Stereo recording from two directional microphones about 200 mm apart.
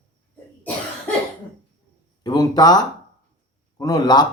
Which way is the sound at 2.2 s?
20° left (ahead or behind).